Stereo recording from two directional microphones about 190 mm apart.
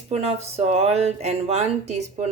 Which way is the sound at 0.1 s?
35° right (ahead or behind).